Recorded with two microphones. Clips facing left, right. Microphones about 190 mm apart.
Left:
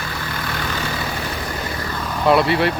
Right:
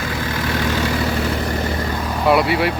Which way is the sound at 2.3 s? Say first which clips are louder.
Even; 10° right (ahead or behind).